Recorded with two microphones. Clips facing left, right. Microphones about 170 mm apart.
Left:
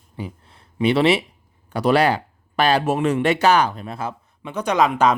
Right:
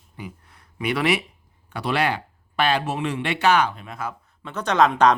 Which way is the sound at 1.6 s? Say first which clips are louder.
Left 6 dB; 40° left (ahead or behind).